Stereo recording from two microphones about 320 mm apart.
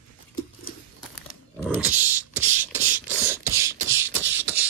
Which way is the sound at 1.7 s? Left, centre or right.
Centre.